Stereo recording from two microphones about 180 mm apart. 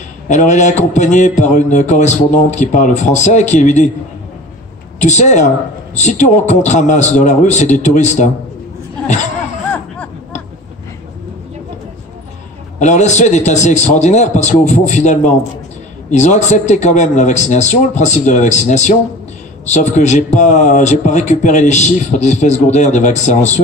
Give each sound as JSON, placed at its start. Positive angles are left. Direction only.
{"t": 0.3, "sound": "speech", "side_deg": 40}
{"t": 5.0, "sound": "speech", "side_deg": 40}
{"t": 12.7, "sound": "speech", "side_deg": 40}